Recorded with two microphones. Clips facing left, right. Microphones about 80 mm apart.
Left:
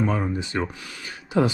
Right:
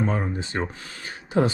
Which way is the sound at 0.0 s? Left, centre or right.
Right.